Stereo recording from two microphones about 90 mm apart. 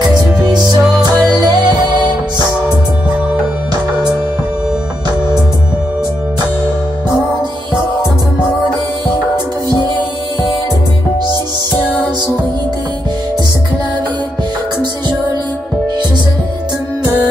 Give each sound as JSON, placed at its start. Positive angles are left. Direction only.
{"t": 0.0, "sound": "music", "side_deg": -50}